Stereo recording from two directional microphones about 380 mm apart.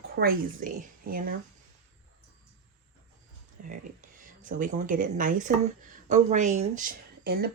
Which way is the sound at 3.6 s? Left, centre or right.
Right.